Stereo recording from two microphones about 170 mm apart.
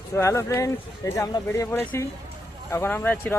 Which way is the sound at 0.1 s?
15° left (ahead or behind).